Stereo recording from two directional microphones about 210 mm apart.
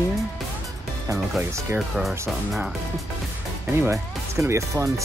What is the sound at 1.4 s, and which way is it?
Speech, 10° right (ahead or behind).